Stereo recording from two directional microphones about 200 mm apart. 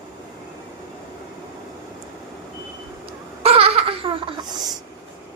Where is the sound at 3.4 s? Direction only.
30° right (ahead or behind).